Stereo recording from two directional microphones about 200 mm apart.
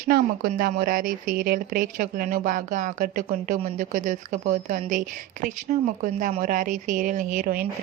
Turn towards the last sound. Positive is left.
turn(degrees=-45)  # may be behind; listen again after turning